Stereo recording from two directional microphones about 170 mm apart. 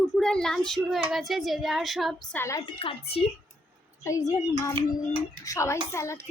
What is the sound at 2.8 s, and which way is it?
Speech, 35° left (ahead or behind).